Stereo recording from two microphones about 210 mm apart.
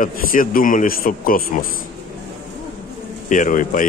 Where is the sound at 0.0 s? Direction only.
40° left (ahead or behind).